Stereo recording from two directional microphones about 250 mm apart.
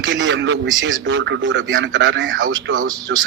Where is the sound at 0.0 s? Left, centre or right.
Right.